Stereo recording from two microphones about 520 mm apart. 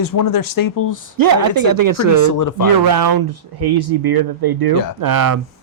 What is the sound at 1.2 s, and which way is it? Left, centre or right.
Speech, right.